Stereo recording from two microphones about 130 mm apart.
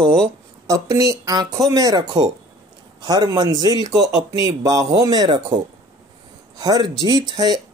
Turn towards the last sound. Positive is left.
turn(degrees=-30)  # may be behind; listen again after turning